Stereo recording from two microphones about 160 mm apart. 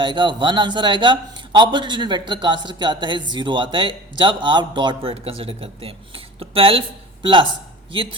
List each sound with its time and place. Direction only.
0.0 s a man's voice: 30° right (ahead or behind)